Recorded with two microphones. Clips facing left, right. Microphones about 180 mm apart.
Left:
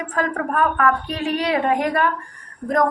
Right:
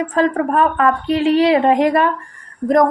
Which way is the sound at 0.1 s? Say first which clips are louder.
Right 5 dB; 25° right (ahead or behind).